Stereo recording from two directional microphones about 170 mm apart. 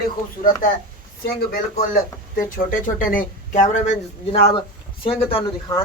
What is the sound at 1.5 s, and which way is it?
Speech, 60° left (ahead or behind).